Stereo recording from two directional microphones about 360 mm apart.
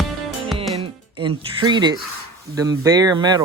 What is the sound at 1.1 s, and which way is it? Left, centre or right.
Speech, centre.